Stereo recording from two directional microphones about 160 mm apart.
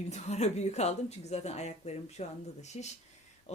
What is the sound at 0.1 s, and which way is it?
Speech, 45° left (ahead or behind).